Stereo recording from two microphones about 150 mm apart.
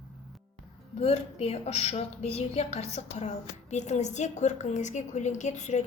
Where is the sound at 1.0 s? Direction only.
40° left (ahead or behind).